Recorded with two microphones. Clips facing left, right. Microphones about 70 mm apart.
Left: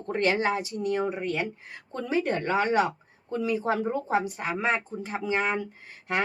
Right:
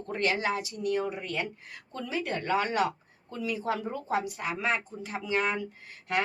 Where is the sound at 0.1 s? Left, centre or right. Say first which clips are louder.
Left 4 dB; left.